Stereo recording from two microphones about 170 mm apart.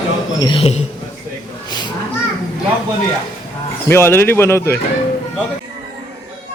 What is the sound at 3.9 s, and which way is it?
Speech, 15° left (ahead or behind).